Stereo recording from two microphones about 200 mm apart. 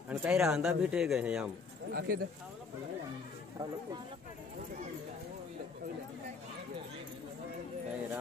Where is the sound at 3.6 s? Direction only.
20° right (ahead or behind).